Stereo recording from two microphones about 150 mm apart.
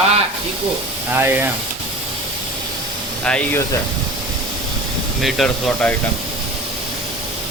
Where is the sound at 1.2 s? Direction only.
15° right (ahead or behind).